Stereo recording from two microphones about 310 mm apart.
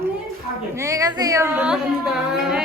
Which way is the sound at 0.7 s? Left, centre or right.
Centre.